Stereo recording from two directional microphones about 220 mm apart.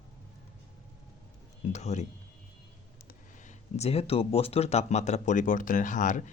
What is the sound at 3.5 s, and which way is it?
Speech, 30° left (ahead or behind).